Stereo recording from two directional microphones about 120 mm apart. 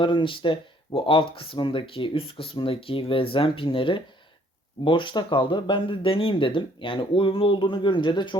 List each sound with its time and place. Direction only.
0.0 s speech: 45° left (ahead or behind)